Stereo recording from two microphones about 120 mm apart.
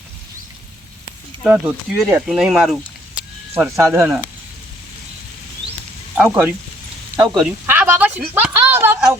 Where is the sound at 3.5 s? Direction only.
20° right (ahead or behind).